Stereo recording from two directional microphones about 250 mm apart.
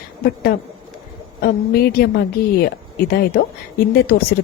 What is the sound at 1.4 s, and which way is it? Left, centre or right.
A woman's voice, left.